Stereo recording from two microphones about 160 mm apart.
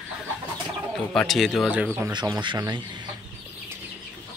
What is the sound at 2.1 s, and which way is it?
Speech, 25° right (ahead or behind).